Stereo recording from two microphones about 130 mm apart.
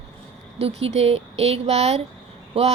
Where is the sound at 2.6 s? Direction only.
45° right (ahead or behind).